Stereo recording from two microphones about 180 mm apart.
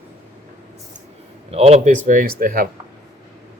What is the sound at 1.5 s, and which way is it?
Speech, 35° right (ahead or behind).